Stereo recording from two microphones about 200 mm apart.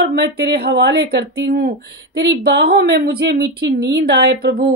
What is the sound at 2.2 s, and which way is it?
Speech, 60° right (ahead or behind).